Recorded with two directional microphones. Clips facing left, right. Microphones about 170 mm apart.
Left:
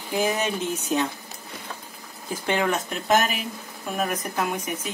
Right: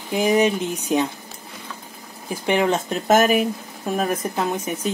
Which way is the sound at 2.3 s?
15° right (ahead or behind).